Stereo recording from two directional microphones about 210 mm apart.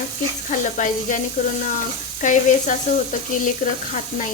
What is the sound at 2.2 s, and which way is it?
Sizzle, 35° left (ahead or behind).